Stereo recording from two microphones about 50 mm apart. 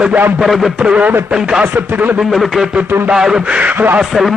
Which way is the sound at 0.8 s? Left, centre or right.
Centre.